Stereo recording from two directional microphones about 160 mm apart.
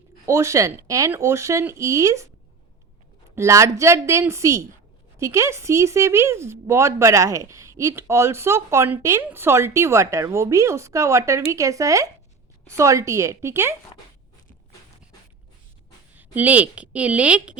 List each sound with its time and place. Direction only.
0.3 s speech: 20° right (ahead or behind)
3.3 s speech: 20° right (ahead or behind)
16.1 s speech: 10° right (ahead or behind)